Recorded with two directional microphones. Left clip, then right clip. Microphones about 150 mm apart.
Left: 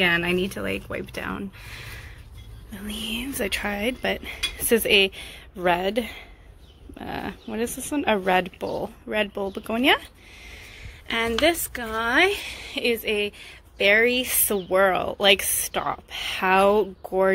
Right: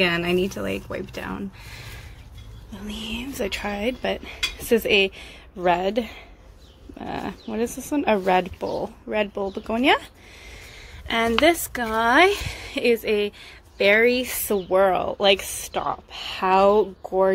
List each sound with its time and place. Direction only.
0.0 s a woman's voice: 5° right (ahead or behind)
11.1 s a woman's voice: 30° right (ahead or behind); by 17.3 s centre (ahead or behind)